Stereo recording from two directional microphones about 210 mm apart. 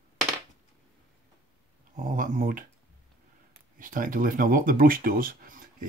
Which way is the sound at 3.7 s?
40° right (ahead or behind).